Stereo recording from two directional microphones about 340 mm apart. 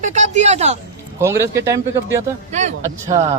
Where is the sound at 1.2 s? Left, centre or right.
Centre.